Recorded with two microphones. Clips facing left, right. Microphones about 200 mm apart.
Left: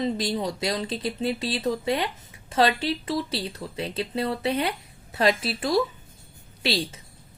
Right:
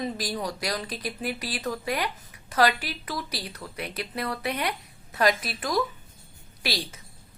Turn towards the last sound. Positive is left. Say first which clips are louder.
# left 5 dB
turn(degrees=25)  # may be behind; listen again after turning